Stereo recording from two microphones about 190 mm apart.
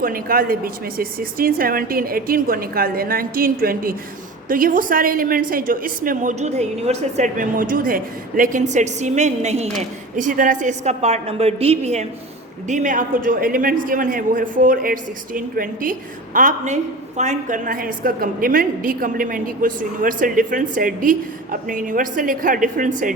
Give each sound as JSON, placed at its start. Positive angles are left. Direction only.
{"t": 0.0, "sound": "a man's voice", "side_deg": -50}